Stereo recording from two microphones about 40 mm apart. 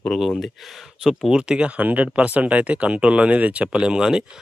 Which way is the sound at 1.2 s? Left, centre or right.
Right.